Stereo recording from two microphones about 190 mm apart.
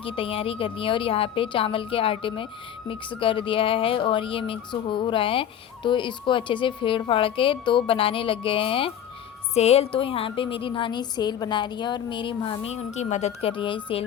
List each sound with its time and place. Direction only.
0.0 s speech: 30° left (ahead or behind)